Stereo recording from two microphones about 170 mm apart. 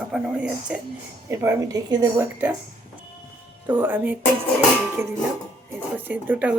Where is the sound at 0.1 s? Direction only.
5° right (ahead or behind).